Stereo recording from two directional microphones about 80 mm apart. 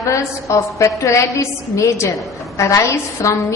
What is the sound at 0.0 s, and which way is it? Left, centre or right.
A woman's voice, left.